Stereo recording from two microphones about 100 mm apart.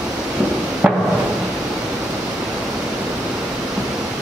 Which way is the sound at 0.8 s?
10° right (ahead or behind).